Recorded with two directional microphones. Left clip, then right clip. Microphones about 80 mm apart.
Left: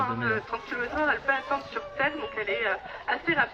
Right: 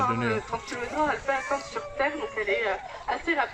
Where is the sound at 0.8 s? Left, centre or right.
Right.